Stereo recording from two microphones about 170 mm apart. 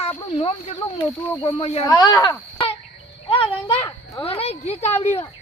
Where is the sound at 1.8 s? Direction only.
20° left (ahead or behind).